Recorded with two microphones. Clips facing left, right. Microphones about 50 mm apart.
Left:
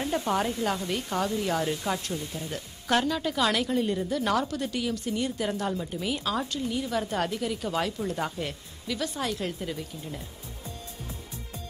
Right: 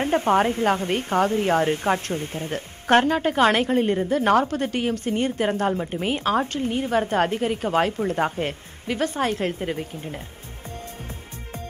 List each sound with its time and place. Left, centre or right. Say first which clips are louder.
0.0 s speech: right 8 dB; right